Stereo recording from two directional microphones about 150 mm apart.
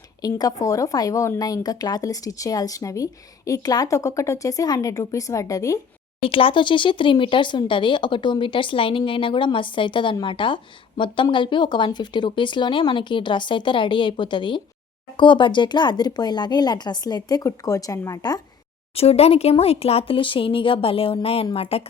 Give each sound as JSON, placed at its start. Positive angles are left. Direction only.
{"t": 0.2, "sound": "a woman's voice", "side_deg": 25}
{"t": 6.2, "sound": "a woman's voice", "side_deg": 35}
{"t": 18.9, "sound": "speech", "side_deg": 45}